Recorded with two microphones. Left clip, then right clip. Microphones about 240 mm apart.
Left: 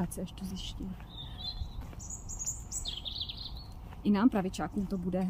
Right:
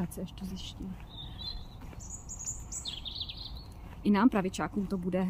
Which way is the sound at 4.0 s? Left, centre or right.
Centre.